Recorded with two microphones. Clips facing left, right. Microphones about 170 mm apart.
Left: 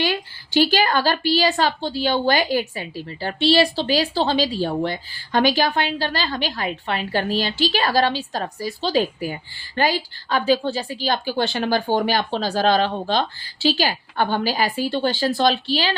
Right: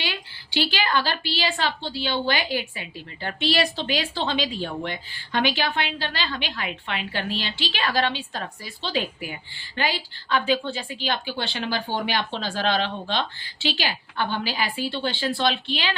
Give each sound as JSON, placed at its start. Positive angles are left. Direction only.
{"t": 0.0, "sound": "a woman's voice", "side_deg": 45}